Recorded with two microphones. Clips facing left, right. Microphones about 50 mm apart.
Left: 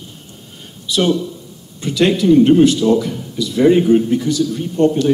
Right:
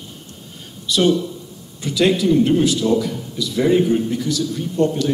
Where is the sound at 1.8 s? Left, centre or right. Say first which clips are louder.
Left 2 dB; left.